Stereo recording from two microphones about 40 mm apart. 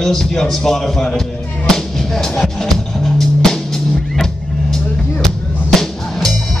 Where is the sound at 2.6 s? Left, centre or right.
Centre.